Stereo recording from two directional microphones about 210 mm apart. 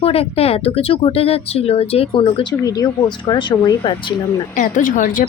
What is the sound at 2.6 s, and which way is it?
A woman's voice, 15° left (ahead or behind).